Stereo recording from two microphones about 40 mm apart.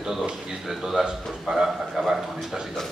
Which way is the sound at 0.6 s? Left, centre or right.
Centre.